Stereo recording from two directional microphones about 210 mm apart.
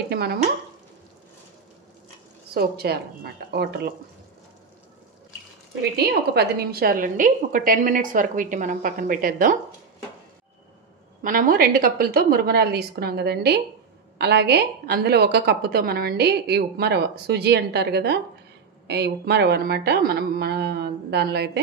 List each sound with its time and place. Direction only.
0.1 s a woman's voice: 50° right (ahead or behind)
2.5 s a woman's voice: 50° right (ahead or behind)
5.8 s a woman's voice: 50° right (ahead or behind)
11.2 s a woman's voice: 40° right (ahead or behind)